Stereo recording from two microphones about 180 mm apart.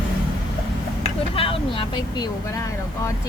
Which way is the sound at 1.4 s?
30° left (ahead or behind).